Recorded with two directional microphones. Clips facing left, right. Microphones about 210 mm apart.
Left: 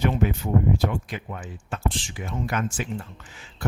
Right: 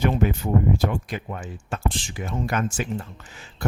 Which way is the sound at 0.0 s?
45° right (ahead or behind).